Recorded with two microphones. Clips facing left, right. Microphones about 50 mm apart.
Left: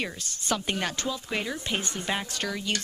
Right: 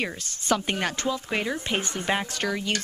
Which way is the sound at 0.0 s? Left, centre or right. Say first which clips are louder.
Right 3 dB; right.